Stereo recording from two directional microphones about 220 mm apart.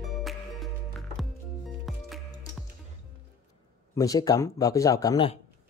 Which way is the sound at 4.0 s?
15° left (ahead or behind).